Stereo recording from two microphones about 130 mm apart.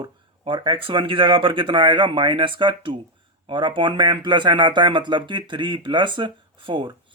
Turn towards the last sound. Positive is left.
turn(degrees=-40)  # may be behind; listen again after turning